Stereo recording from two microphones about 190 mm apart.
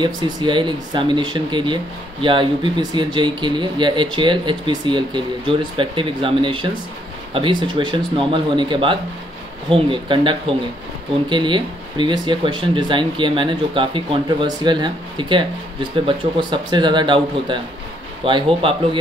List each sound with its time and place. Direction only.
0.0 s speech: 25° right (ahead or behind)